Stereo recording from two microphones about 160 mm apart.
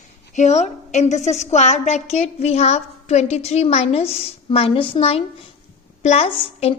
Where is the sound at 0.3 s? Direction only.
45° left (ahead or behind).